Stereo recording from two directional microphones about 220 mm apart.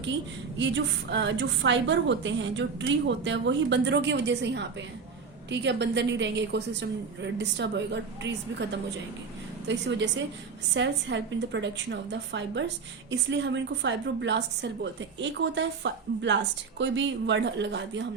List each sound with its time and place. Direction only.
0.6 s a woman's voice: 55° right (ahead or behind)